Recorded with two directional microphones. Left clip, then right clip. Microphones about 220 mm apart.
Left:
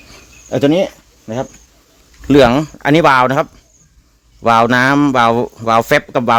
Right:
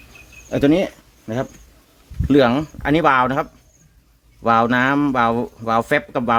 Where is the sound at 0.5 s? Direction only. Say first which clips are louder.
Left 4 dB; 20° left (ahead or behind).